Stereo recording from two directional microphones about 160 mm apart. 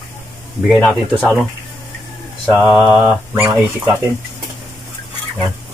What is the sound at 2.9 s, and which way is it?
Mantra, 5° right (ahead or behind).